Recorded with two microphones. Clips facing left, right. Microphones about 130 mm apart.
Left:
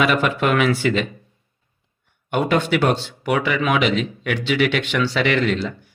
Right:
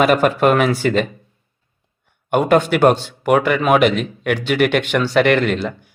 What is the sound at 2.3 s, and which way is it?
Speech, 45° right (ahead or behind).